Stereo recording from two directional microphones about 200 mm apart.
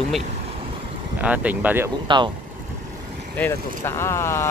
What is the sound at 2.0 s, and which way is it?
Speech, 25° right (ahead or behind).